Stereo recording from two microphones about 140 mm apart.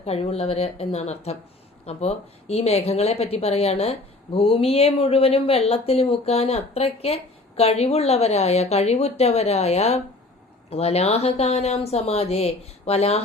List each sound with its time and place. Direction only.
0.0 s speech: 45° left (ahead or behind)